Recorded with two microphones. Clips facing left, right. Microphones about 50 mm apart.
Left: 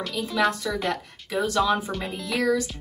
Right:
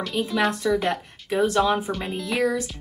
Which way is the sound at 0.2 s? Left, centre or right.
Right.